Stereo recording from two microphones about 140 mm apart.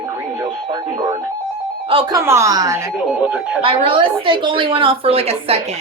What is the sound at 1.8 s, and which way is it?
Speech, 40° right (ahead or behind).